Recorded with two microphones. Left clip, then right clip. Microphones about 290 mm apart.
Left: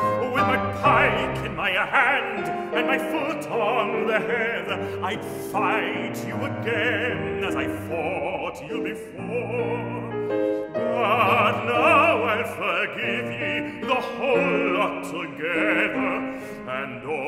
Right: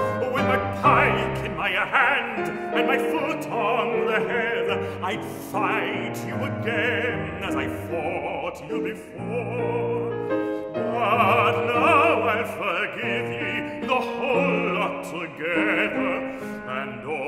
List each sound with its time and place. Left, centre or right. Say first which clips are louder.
0.3 s music: left 1 dB; centre
2.7 s opera: right 2 dB; centre
11.0 s opera: even; centre
15.4 s male singing: even; centre